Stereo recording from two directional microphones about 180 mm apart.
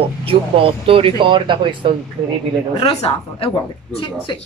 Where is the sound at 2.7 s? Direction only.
30° left (ahead or behind).